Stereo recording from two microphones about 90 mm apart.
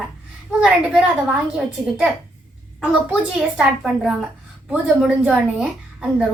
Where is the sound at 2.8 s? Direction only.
10° right (ahead or behind).